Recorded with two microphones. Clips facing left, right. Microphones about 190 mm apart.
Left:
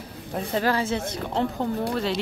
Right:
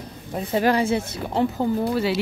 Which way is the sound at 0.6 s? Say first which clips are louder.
Right 6 dB; 15° right (ahead or behind).